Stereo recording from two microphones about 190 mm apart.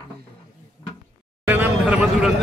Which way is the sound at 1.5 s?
5° right (ahead or behind).